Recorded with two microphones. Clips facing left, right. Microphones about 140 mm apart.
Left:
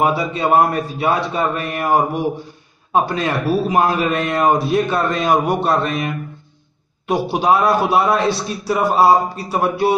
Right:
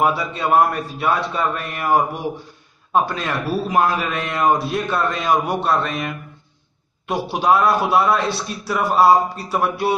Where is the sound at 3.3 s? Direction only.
20° left (ahead or behind).